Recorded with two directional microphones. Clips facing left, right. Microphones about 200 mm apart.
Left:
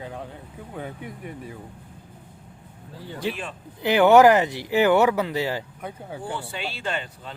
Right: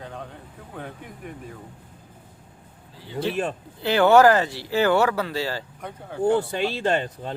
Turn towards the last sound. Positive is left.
turn(degrees=-40)  # may be behind; listen again after turning